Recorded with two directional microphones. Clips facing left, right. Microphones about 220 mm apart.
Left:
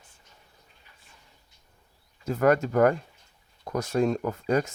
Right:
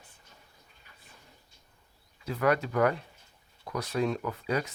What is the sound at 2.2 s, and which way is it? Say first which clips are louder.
Speech: left 5 dB; 45° left (ahead or behind).